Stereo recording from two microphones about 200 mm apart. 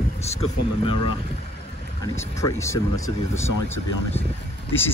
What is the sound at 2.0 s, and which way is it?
Speech, 15° left (ahead or behind).